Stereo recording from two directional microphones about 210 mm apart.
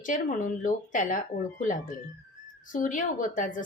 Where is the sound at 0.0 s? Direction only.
40° left (ahead or behind).